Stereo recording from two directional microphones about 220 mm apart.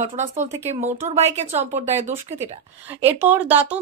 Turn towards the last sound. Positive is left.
turn(degrees=-5)  # may be behind; listen again after turning